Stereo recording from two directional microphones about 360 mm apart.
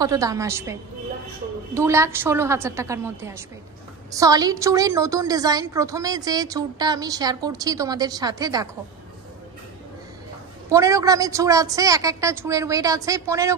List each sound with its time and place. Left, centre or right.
0.0 s a woman's voice: centre
10.7 s a woman's voice: centre